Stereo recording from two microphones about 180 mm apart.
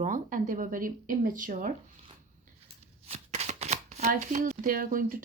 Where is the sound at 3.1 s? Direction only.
40° right (ahead or behind).